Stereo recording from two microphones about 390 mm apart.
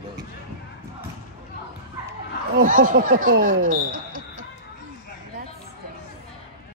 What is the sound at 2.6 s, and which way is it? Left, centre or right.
Speech, right.